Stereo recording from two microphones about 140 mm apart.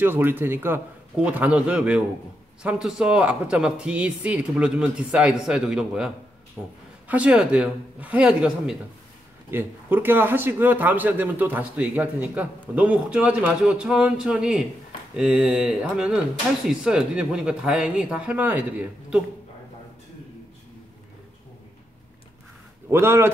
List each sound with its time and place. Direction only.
0.0 s a man's voice: 15° right (ahead or behind)
22.8 s a man's voice: 20° right (ahead or behind)